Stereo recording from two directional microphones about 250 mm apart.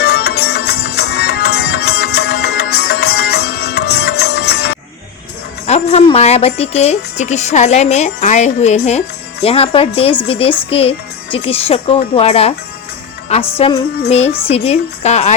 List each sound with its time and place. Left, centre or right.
0.0 s music: left
5.6 s speech: left